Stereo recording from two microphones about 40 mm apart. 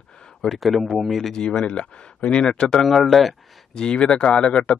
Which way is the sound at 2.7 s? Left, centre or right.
Centre.